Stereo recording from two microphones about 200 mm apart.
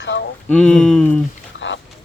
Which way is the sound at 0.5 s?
5° left (ahead or behind).